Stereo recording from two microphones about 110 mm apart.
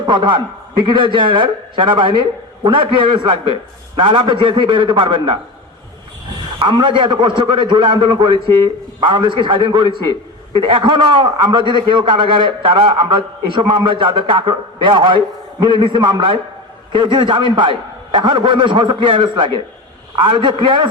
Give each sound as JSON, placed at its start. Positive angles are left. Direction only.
{"t": 0.0, "sound": "a man's voice", "side_deg": -45}
{"t": 6.6, "sound": "a man's voice", "side_deg": -45}